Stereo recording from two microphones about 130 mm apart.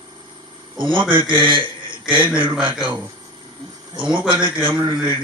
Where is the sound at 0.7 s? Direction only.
40° right (ahead or behind).